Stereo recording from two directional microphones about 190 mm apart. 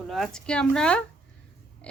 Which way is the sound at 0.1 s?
5° left (ahead or behind).